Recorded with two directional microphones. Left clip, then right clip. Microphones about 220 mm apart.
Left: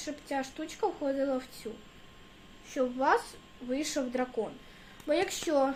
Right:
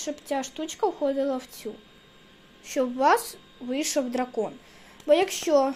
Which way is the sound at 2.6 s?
35° right (ahead or behind).